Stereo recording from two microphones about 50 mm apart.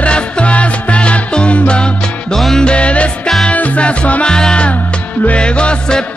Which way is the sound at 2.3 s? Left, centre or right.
Centre.